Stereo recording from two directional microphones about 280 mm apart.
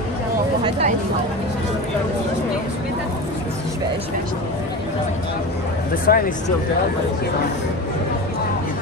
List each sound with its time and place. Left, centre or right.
6.0 s speech: left